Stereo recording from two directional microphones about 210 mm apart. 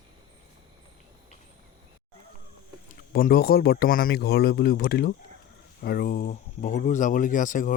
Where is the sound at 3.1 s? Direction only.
45° left (ahead or behind).